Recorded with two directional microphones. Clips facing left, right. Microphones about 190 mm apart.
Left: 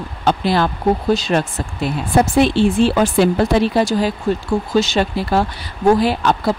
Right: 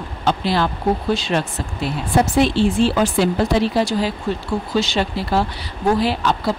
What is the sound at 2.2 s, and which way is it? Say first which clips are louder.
Speech: left 2 dB; 55° left (ahead or behind).